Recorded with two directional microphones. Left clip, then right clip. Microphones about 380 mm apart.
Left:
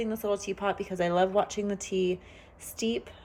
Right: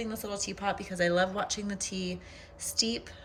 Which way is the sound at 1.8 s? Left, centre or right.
Centre.